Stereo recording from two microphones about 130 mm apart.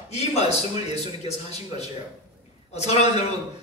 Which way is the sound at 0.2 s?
55° left (ahead or behind).